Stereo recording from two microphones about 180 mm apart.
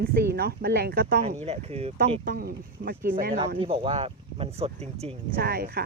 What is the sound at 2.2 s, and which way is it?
Speech, 55° right (ahead or behind).